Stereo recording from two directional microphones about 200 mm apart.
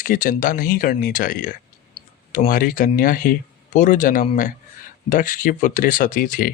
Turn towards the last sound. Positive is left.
turn(degrees=40)  # may be behind; listen again after turning